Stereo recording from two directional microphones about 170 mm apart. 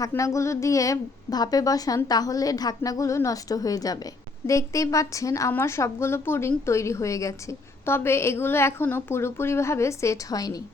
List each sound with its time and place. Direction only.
0.0 s a woman's voice: 20° left (ahead or behind)